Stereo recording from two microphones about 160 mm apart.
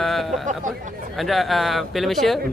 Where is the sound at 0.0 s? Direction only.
Centre (ahead or behind).